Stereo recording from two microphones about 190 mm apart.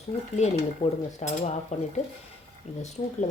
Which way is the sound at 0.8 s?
30° left (ahead or behind).